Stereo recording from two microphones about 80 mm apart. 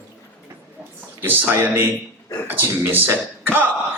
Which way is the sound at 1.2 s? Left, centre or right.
Right.